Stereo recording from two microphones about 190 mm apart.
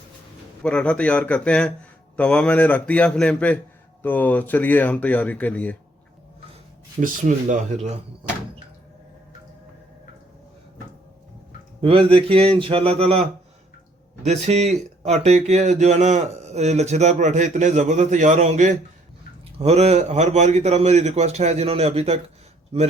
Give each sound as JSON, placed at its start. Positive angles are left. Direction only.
{"t": 0.6, "sound": "a man's voice", "side_deg": 5}
{"t": 7.0, "sound": "speech", "side_deg": -40}
{"t": 11.8, "sound": "speech", "side_deg": -30}
{"t": 14.3, "sound": "speech", "side_deg": -35}